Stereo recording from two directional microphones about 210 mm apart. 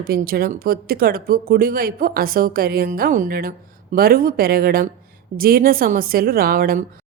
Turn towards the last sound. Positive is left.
turn(degrees=-45)  # may be behind; listen again after turning